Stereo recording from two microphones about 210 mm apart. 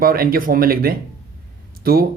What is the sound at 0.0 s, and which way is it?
A man's voice, 45° right (ahead or behind).